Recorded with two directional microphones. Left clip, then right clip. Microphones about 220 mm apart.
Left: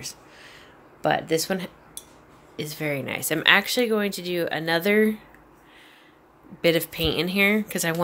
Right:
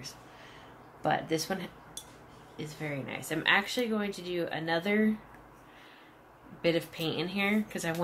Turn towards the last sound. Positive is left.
turn(degrees=50)  # may be behind; listen again after turning